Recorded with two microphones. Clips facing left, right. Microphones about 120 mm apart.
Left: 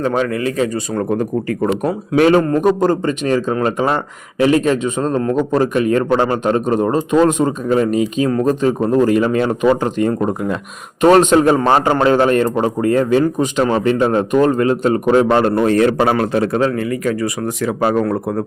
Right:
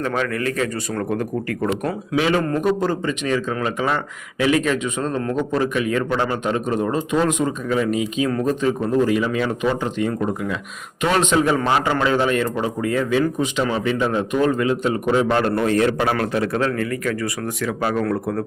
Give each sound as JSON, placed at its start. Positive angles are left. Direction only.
{"t": 0.0, "sound": "a man's voice", "side_deg": 25}
{"t": 2.3, "sound": "a man's voice", "side_deg": 40}
{"t": 16.6, "sound": "a man's voice", "side_deg": 20}